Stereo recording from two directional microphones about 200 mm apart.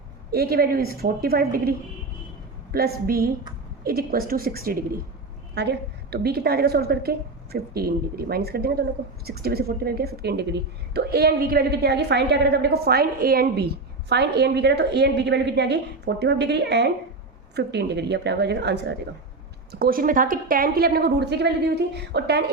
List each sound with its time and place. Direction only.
0.3 s a woman's voice: 50° right (ahead or behind)
2.7 s a woman's voice: 50° right (ahead or behind)
19.7 s a woman's voice: 50° right (ahead or behind)